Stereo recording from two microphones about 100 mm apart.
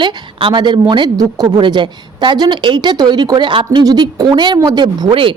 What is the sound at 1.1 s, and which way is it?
Speech, 40° right (ahead or behind).